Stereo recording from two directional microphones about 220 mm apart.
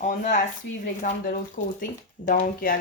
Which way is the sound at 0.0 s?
35° left (ahead or behind).